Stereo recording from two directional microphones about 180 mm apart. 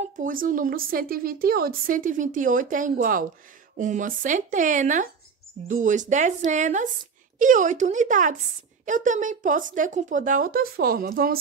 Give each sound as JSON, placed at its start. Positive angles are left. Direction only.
{"t": 0.0, "sound": "a woman's voice", "side_deg": -50}